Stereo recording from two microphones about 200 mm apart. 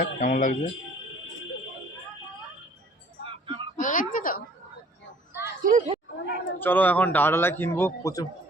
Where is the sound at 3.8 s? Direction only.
40° left (ahead or behind).